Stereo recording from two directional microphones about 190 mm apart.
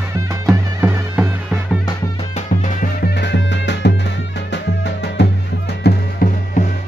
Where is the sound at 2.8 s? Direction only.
55° left (ahead or behind).